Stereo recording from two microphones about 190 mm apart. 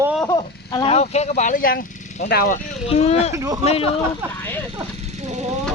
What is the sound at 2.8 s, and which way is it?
Speech, 35° left (ahead or behind).